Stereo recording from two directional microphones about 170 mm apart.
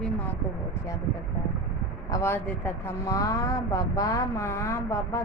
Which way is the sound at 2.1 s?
15° left (ahead or behind).